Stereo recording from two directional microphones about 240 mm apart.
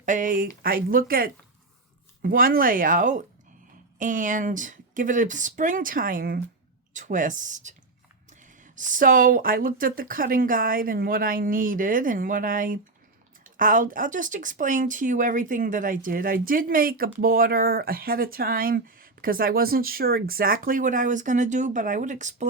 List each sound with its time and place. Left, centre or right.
0.0 s speech: right